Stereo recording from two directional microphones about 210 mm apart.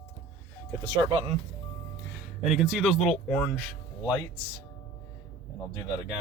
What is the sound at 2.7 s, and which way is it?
Speech, centre (ahead or behind).